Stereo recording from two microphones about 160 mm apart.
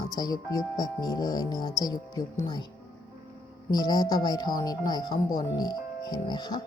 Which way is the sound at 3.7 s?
25° left (ahead or behind).